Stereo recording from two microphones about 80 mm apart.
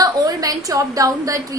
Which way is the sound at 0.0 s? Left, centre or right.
Right.